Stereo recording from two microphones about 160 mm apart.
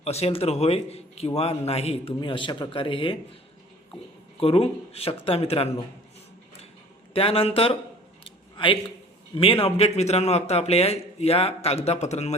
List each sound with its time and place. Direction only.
0.0 s speech: 40° left (ahead or behind)
4.4 s speech: 35° left (ahead or behind)
7.1 s speech: 35° left (ahead or behind)
8.2 s a sound: 35° left (ahead or behind)
9.3 s speech: 35° left (ahead or behind)